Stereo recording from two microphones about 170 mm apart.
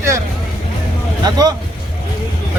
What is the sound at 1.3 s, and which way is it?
Speech, 25° right (ahead or behind).